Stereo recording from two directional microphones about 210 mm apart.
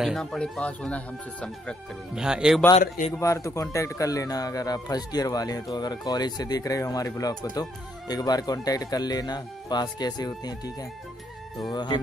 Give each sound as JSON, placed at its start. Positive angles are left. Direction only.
{"t": 0.0, "sound": "speech", "side_deg": 0}
{"t": 3.1, "sound": "a man's voice", "side_deg": 15}